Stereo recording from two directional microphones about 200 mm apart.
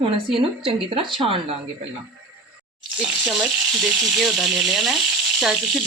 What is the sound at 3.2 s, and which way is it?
Speech, centre (ahead or behind).